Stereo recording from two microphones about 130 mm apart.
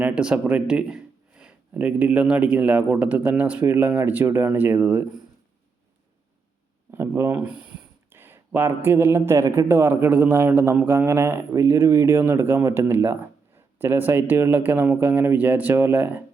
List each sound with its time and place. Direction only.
0.0 s speech: 5° right (ahead or behind)
6.9 s speech: 20° right (ahead or behind)